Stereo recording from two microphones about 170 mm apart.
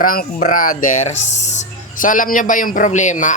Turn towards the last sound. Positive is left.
turn(degrees=45)  # may be behind; listen again after turning